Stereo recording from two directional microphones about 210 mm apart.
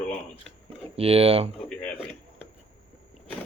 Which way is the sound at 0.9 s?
30° right (ahead or behind).